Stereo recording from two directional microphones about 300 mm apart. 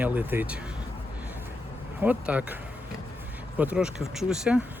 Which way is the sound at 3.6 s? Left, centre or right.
Centre.